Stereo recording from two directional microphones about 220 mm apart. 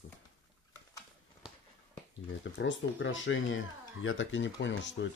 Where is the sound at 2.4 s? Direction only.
55° left (ahead or behind).